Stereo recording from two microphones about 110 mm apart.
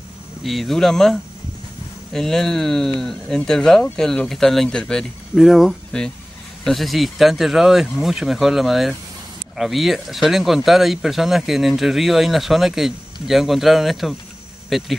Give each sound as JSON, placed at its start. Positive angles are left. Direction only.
{"t": 0.4, "sound": "speech", "side_deg": 0}
{"t": 2.1, "sound": "speech", "side_deg": 5}